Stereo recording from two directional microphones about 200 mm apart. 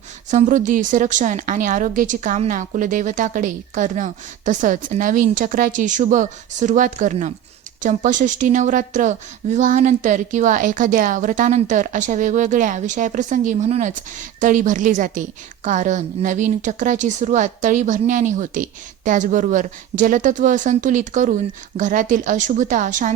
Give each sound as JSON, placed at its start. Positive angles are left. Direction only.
{"t": 0.3, "sound": "a woman's voice", "side_deg": -40}